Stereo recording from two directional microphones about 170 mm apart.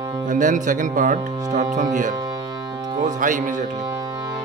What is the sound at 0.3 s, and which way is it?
Speech, 50° right (ahead or behind).